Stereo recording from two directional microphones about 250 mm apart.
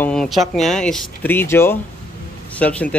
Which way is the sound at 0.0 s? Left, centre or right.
Centre.